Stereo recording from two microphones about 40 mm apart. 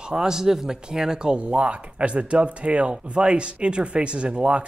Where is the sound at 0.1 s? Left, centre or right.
Centre.